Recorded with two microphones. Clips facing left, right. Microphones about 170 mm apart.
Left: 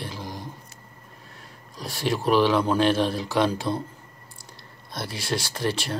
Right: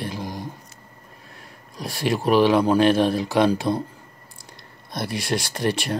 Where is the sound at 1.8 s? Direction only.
15° right (ahead or behind).